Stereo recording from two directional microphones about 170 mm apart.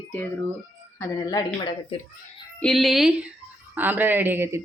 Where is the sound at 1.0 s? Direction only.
20° left (ahead or behind).